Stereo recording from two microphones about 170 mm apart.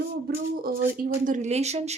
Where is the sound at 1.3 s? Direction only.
45° right (ahead or behind).